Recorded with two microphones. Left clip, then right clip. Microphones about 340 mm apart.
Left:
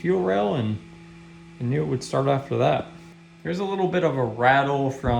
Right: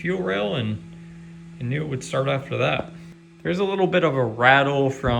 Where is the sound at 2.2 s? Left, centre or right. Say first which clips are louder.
Left 2 dB; centre.